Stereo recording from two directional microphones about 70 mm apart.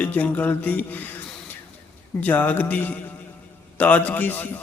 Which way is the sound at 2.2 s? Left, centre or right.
Left.